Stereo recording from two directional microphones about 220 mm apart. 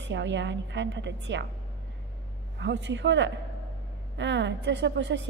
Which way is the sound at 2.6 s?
55° right (ahead or behind).